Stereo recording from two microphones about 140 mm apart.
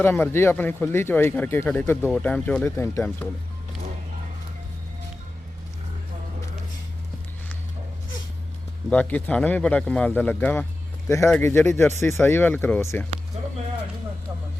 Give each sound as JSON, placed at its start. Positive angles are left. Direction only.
{"t": 0.0, "sound": "speech", "side_deg": 15}
{"t": 8.9, "sound": "speech", "side_deg": 10}
{"t": 13.4, "sound": "a sound", "side_deg": -50}